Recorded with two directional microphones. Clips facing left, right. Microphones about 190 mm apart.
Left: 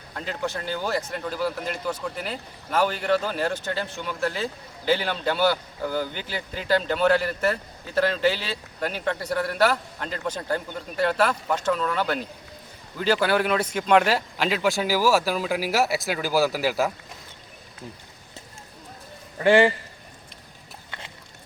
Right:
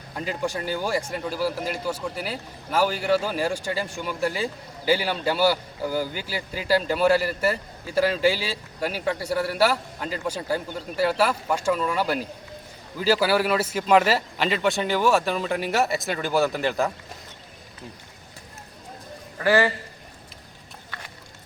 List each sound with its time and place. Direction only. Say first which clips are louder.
0.1 s speech: right 2 dB; 10° right (ahead or behind)
19.4 s a man's voice: left 3 dB; 20° left (ahead or behind)